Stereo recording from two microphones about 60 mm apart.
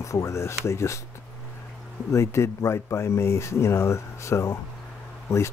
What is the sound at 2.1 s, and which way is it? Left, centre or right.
Speech, left.